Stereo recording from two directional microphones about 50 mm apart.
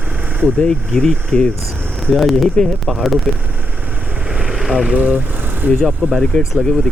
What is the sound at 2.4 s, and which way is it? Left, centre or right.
Speech, centre.